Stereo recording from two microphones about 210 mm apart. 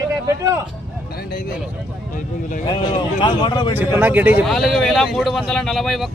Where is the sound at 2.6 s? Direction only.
20° left (ahead or behind).